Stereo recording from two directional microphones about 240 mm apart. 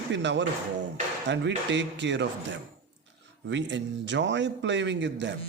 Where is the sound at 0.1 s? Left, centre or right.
Right.